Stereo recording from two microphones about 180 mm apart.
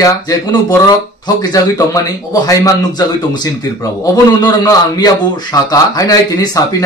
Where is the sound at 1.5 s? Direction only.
20° left (ahead or behind).